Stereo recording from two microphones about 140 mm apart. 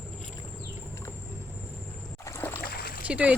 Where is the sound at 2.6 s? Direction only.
90° left.